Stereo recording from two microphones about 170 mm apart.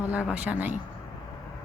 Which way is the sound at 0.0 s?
10° right (ahead or behind).